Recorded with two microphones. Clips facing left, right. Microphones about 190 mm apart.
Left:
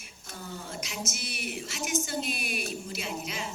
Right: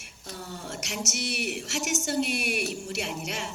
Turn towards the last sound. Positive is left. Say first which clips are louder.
# right 2 dB
turn(degrees=-70)  # may be behind; listen again after turning